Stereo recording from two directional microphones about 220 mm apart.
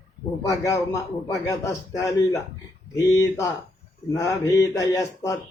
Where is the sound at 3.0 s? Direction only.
15° left (ahead or behind).